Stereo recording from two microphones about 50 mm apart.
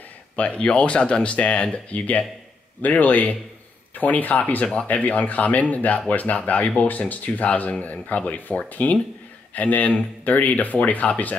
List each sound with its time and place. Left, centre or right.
0.4 s speech: left